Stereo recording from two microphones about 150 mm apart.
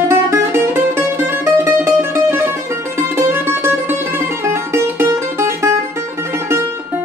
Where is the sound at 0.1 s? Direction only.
15° right (ahead or behind).